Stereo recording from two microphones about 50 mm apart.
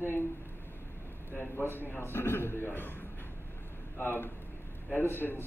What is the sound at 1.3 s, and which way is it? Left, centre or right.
A man's voice, left.